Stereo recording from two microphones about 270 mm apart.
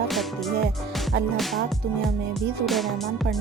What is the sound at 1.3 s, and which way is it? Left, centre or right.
Music, centre.